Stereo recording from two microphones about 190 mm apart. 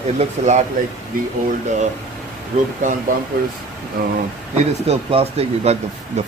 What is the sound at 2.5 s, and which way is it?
Speech, 35° right (ahead or behind).